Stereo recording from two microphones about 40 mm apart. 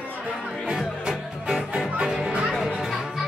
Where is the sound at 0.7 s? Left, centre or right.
Centre.